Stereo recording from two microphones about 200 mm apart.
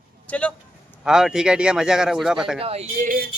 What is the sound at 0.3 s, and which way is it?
Speech, 5° left (ahead or behind).